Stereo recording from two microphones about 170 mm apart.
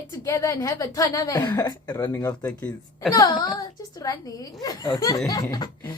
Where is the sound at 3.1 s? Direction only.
20° left (ahead or behind).